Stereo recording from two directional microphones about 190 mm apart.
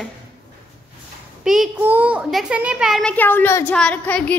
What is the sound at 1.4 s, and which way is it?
A child's voice, centre (ahead or behind).